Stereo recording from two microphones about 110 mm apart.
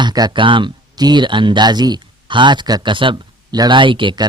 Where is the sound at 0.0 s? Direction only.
40° right (ahead or behind).